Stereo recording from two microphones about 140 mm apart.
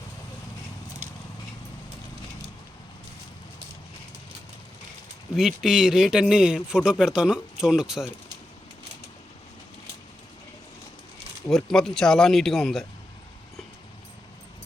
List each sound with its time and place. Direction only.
5.4 s speech: 5° right (ahead or behind)
11.4 s speech: 5° left (ahead or behind)